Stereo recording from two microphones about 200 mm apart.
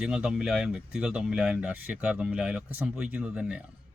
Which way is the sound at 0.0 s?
5° right (ahead or behind).